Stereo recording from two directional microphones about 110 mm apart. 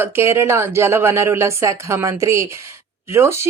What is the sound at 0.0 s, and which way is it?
Speech, 25° right (ahead or behind).